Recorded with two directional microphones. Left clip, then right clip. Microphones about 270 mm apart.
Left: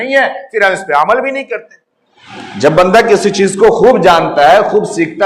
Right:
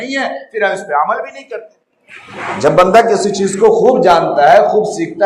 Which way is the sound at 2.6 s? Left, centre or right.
Left.